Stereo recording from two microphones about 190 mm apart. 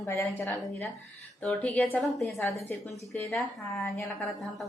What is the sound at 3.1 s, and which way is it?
A woman's voice, 10° left (ahead or behind).